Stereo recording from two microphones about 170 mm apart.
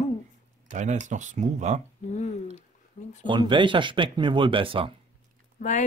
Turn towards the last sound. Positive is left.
turn(degrees=45)  # may be behind; listen again after turning